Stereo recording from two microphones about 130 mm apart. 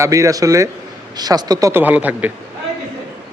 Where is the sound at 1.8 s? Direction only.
10° right (ahead or behind).